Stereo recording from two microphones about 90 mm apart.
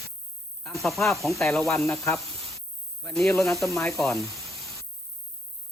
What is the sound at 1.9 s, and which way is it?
Speech, 35° left (ahead or behind).